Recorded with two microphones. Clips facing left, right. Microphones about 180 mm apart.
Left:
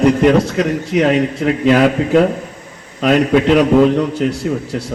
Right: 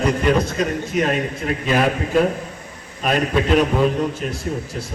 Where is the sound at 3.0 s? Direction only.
80° left.